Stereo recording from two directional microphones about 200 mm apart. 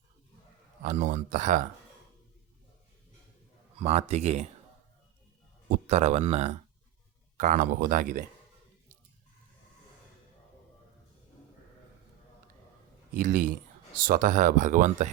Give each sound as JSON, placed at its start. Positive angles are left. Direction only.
{"t": 0.8, "sound": "speech", "side_deg": -40}
{"t": 3.8, "sound": "speech", "side_deg": -30}
{"t": 5.6, "sound": "speech", "side_deg": -35}
{"t": 13.1, "sound": "speech", "side_deg": -40}